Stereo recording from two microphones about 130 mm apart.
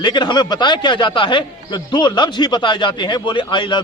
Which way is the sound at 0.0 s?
35° left (ahead or behind).